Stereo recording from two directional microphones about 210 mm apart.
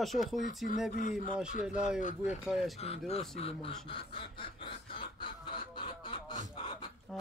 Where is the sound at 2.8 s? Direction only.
30° left (ahead or behind).